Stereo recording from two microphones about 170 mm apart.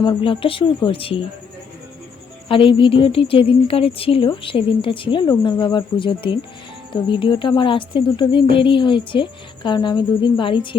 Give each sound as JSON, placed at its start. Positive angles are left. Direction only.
{"t": 0.0, "sound": "a woman's voice", "side_deg": 30}
{"t": 2.5, "sound": "a woman's voice", "side_deg": 30}